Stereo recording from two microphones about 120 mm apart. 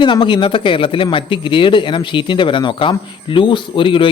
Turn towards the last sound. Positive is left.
turn(degrees=45)  # may be behind; listen again after turning